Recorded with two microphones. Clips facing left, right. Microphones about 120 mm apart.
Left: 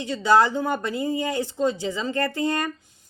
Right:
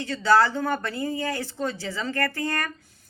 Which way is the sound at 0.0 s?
15° left (ahead or behind).